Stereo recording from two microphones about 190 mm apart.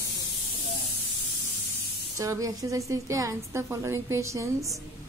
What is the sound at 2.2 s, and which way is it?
A woman's voice, 15° right (ahead or behind).